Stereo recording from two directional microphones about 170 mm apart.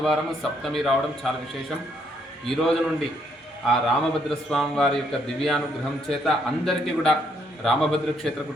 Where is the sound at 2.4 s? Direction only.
5° left (ahead or behind).